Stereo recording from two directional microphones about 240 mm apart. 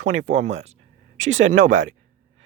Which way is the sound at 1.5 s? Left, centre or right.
Right.